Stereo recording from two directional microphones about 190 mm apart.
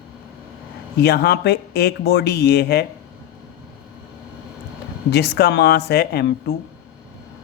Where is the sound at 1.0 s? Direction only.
60° left (ahead or behind).